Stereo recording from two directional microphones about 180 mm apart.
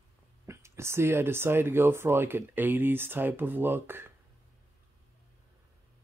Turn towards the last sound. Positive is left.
turn(degrees=-10)  # may be behind; listen again after turning